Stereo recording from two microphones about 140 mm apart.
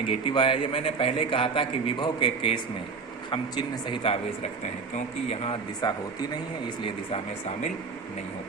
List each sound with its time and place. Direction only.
0.1 s a man's voice: 40° left (ahead or behind)
5.8 s a man's voice: 30° left (ahead or behind)